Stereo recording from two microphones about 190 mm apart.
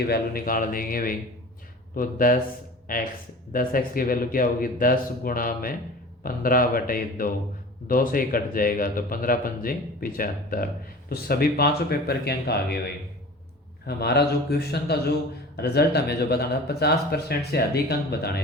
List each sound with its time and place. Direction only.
0.0 s a man's voice: 55° left (ahead or behind)
13.8 s speech: 60° left (ahead or behind)